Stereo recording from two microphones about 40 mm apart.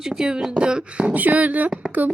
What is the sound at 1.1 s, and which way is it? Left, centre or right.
Speech, right.